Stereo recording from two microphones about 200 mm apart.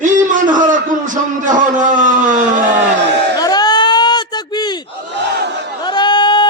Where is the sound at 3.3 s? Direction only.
20° left (ahead or behind).